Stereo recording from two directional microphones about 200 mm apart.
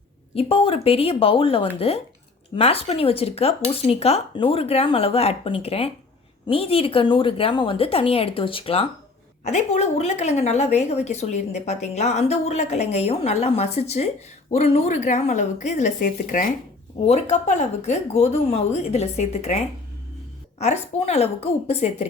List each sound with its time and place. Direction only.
0.3 s a woman's voice: 30° left (ahead or behind)